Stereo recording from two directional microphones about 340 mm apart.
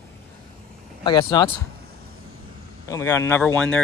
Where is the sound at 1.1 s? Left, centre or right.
Centre.